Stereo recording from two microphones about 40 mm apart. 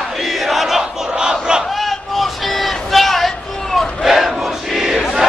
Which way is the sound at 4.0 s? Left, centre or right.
Centre.